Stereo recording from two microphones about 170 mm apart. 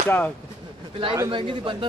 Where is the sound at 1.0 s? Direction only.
30° right (ahead or behind).